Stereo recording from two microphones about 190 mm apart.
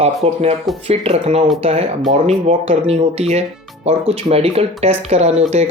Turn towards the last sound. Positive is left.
turn(degrees=-35)  # may be behind; listen again after turning